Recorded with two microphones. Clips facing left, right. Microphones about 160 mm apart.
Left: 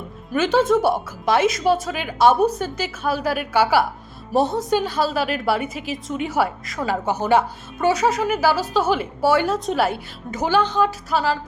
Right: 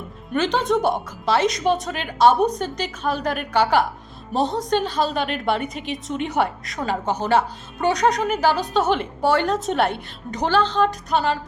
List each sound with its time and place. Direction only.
0.3 s a woman's voice: 5° left (ahead or behind)